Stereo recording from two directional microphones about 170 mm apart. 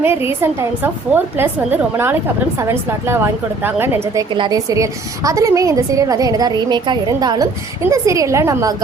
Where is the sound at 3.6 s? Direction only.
15° right (ahead or behind).